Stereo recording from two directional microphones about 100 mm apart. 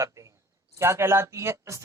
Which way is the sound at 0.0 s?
35° right (ahead or behind).